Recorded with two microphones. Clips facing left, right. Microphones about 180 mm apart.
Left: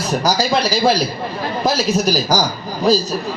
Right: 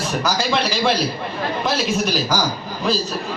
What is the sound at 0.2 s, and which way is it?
A man's voice, 40° left (ahead or behind).